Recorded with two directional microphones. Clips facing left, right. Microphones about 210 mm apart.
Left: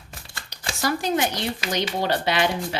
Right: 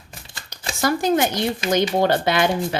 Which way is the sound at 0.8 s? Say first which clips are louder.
Right 4 dB; 50° right (ahead or behind).